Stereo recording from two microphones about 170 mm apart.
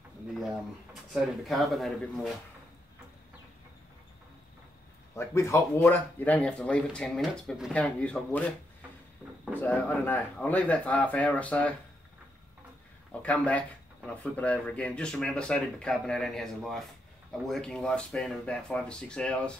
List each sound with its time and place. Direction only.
1.4 s speech: centre (ahead or behind)
5.1 s speech: 15° left (ahead or behind)
13.2 s speech: 10° left (ahead or behind)